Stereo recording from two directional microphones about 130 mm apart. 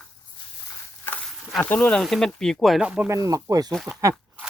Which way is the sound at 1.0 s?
10° left (ahead or behind).